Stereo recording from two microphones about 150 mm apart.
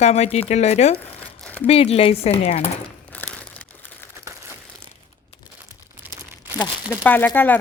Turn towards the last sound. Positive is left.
turn(degrees=15)  # may be behind; listen again after turning